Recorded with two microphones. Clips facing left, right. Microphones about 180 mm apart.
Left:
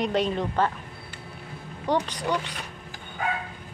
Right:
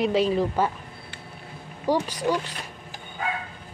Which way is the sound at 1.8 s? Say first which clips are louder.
Right 2 dB; 10° right (ahead or behind).